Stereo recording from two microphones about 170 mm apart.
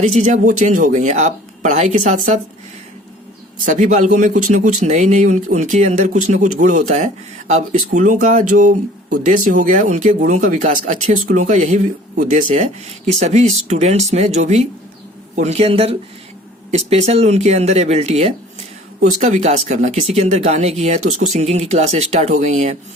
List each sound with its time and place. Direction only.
0.0 s speech: 40° right (ahead or behind)
3.7 s speech: 45° right (ahead or behind)